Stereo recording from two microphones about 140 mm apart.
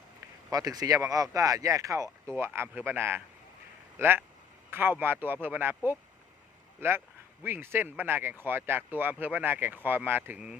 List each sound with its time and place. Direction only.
0.5 s speech: 25° right (ahead or behind); by 10.6 s 10° right (ahead or behind)